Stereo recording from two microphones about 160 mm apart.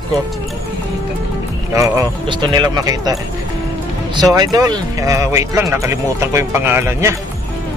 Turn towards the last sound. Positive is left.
turn(degrees=-15)  # may be behind; listen again after turning